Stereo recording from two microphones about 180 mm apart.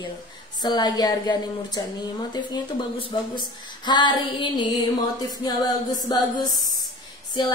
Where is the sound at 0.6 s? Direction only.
25° left (ahead or behind).